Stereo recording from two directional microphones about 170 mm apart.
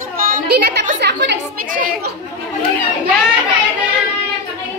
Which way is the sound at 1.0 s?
85° right.